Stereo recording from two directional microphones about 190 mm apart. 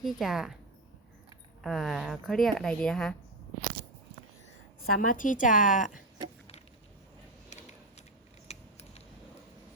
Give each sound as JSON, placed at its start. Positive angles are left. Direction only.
{"t": 0.0, "sound": "speech", "side_deg": 0}
{"t": 1.6, "sound": "speech", "side_deg": 0}
{"t": 4.9, "sound": "a woman's voice", "side_deg": 45}
{"t": 7.5, "sound": "a sound", "side_deg": 35}
{"t": 8.4, "sound": "scissors", "side_deg": 35}